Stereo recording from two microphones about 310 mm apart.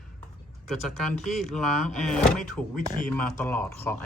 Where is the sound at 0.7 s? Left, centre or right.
Centre.